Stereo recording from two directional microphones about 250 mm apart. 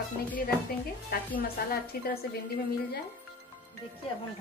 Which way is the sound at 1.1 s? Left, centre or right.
Left.